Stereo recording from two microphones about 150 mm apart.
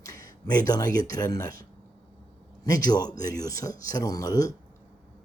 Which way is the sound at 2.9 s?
25° left (ahead or behind).